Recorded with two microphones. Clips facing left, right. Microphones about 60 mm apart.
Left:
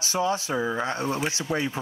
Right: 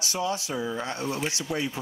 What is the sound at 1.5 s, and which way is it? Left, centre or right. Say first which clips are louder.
Speech: left 3 dB; left.